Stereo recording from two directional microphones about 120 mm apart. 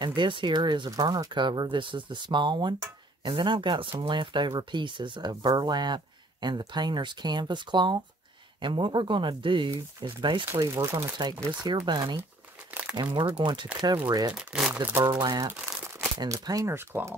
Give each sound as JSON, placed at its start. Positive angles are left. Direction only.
{"t": 0.0, "sound": "speech", "side_deg": -40}
{"t": 10.6, "sound": "speech", "side_deg": -30}
{"t": 14.3, "sound": "speech", "side_deg": -5}
{"t": 14.8, "sound": "speech", "side_deg": -15}
{"t": 15.0, "sound": "speech", "side_deg": -35}